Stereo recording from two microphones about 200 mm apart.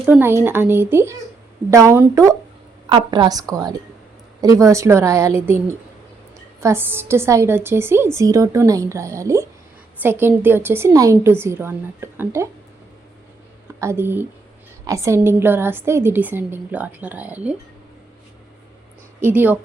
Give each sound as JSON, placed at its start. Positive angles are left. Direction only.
{"t": 0.0, "sound": "a woman's voice", "side_deg": -10}
{"t": 13.7, "sound": "a woman's voice", "side_deg": -15}
{"t": 19.2, "sound": "a woman's voice", "side_deg": -10}